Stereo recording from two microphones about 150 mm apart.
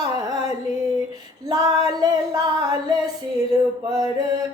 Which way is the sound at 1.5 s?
25° right (ahead or behind).